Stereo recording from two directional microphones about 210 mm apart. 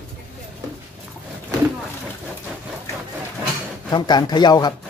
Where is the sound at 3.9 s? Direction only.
20° left (ahead or behind).